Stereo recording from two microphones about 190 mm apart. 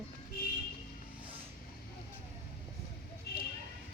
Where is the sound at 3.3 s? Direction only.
60° left (ahead or behind).